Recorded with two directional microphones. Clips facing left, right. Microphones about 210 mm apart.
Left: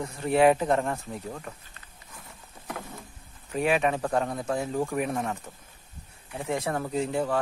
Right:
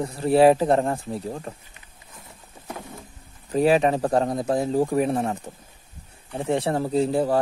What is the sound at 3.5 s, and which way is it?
Speech, 35° right (ahead or behind).